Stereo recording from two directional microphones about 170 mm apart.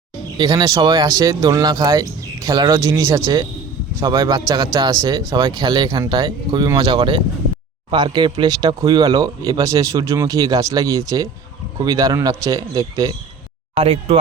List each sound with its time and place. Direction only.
0.3 s speech: 25° right (ahead or behind)
13.7 s speech: 35° right (ahead or behind)